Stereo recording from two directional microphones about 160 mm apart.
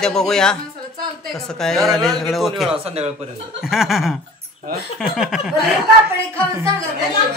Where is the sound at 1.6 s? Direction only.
Centre (ahead or behind).